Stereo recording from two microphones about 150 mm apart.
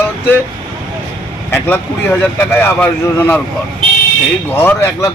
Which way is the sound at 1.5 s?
15° left (ahead or behind).